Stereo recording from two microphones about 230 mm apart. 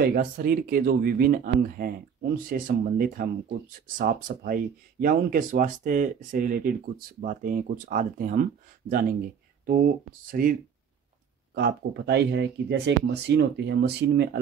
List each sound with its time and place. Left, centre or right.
0.0 s speech: right
10.3 s speech: right